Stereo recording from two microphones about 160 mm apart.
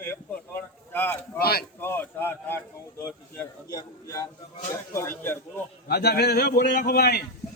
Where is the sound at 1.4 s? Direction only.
75° left (ahead or behind).